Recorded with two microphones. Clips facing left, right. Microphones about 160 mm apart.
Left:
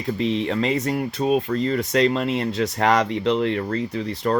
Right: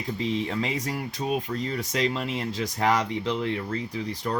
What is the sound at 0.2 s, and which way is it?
Speech, 70° left (ahead or behind).